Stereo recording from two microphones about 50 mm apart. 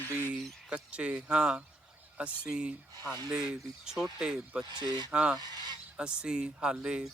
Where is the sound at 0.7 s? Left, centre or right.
Right.